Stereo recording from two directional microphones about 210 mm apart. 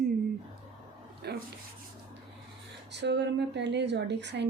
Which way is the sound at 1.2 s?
50° right (ahead or behind).